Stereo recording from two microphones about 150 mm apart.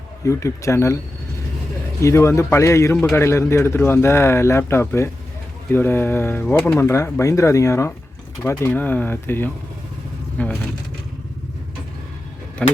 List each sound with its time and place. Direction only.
0.3 s speech: 20° left (ahead or behind)
2.0 s a man's voice: 20° left (ahead or behind)
12.6 s a man's voice: 10° left (ahead or behind)